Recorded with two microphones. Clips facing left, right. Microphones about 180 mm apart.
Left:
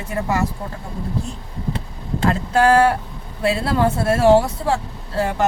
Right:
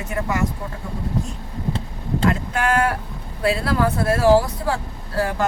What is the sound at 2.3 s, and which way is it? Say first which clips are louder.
Speech: left 7 dB; 35° left (ahead or behind).